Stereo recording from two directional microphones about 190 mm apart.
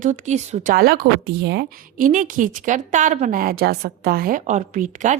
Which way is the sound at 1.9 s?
45° right (ahead or behind).